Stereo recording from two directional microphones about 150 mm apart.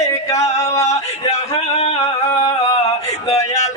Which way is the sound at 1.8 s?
40° left (ahead or behind).